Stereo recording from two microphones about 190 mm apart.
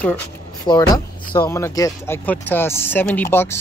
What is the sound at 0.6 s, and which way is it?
Speech, 25° left (ahead or behind).